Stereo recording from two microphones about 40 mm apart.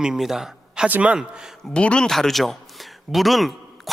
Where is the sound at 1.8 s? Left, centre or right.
Left.